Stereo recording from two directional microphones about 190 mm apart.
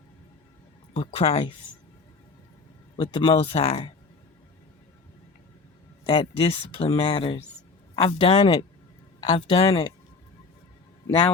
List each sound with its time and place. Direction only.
0.9 s speech: 30° left (ahead or behind)
2.9 s speech: 25° left (ahead or behind)
6.1 s speech: 30° left (ahead or behind)